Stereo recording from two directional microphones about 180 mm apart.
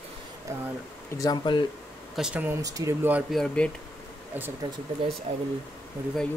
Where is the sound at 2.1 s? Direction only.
5° right (ahead or behind).